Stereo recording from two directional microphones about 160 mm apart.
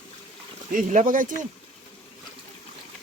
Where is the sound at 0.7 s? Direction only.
55° right (ahead or behind).